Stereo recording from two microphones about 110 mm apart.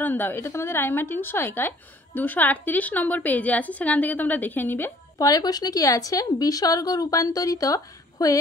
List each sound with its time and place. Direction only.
0.0 s a woman's voice: 15° left (ahead or behind)
5.1 s speech: 35° left (ahead or behind)